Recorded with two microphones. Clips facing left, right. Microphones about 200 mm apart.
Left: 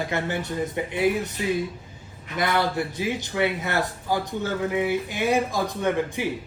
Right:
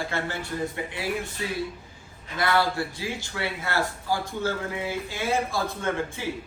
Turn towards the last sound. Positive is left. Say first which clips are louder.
# left 5 dB
turn(degrees=15)  # may be behind; listen again after turning